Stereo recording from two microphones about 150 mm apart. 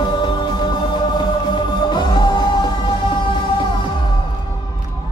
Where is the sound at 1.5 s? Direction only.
30° left (ahead or behind).